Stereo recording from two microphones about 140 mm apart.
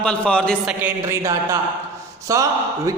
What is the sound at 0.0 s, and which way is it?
Speech, 5° left (ahead or behind).